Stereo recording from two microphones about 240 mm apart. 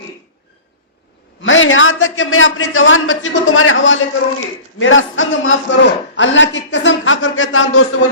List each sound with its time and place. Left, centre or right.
1.4 s a man's voice: left